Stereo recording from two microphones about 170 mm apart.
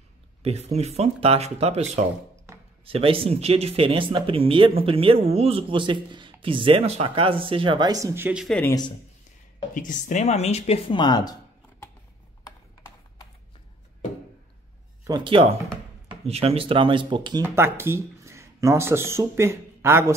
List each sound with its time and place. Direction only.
0.4 s speech: 40° right (ahead or behind); by 8.5 s 5° right (ahead or behind)
9.8 s speech: 50° left (ahead or behind); by 11.3 s 25° left (ahead or behind)
15.0 s speech: 25° right (ahead or behind)
17.6 s speech: 15° right (ahead or behind)